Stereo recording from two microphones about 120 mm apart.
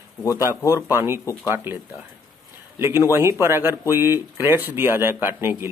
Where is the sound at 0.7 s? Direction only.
20° right (ahead or behind).